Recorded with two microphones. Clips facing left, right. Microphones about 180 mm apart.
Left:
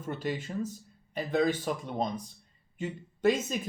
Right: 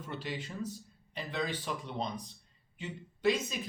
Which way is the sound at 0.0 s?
45° left (ahead or behind).